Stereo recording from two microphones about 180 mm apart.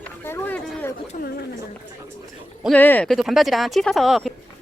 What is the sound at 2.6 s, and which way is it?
Speech, 5° left (ahead or behind).